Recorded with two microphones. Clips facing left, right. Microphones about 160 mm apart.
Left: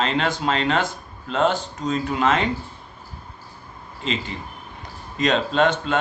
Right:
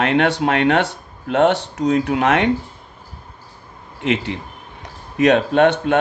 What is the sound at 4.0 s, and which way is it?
Speech, 70° right (ahead or behind).